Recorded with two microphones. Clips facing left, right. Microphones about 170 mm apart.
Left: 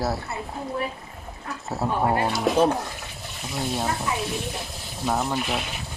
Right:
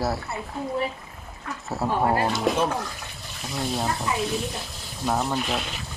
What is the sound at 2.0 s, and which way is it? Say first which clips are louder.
Speech: even; 20° left (ahead or behind).